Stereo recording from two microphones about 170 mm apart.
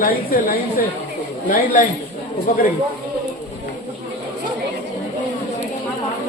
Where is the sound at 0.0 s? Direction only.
55° left (ahead or behind).